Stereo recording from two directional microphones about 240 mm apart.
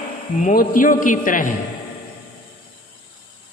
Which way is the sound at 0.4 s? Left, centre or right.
Left.